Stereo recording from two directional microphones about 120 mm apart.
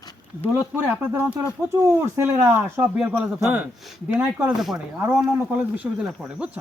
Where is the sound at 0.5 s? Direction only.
20° right (ahead or behind).